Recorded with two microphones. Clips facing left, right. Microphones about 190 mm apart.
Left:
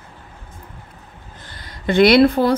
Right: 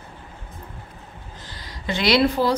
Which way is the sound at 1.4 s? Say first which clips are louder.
Left 7 dB; 55° left (ahead or behind).